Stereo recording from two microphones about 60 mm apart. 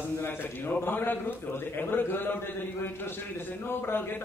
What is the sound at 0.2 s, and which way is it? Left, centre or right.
A man's voice, left.